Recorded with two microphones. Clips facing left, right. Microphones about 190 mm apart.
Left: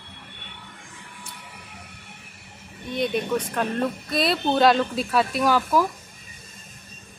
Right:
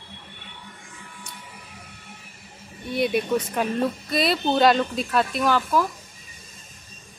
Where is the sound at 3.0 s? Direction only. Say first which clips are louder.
Right 2 dB; 10° right (ahead or behind); by 5.8 s 10° left (ahead or behind).